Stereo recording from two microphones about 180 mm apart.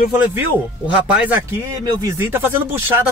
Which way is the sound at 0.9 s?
10° right (ahead or behind).